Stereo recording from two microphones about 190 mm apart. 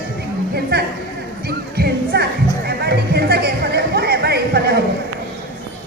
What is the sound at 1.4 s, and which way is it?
Music, 55° right (ahead or behind).